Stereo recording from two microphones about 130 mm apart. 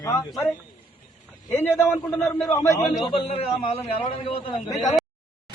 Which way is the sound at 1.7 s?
15° left (ahead or behind).